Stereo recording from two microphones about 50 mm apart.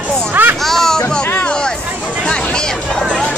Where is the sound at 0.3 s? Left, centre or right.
Right.